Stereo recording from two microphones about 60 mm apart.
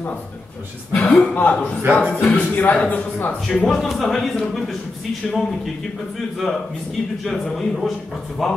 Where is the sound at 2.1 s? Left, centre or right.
Left.